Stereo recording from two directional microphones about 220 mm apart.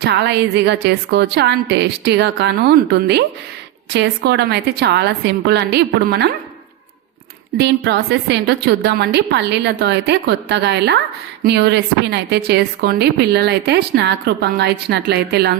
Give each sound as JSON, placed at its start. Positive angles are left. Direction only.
{"t": 0.0, "sound": "speech", "side_deg": -50}
{"t": 7.6, "sound": "speech", "side_deg": -50}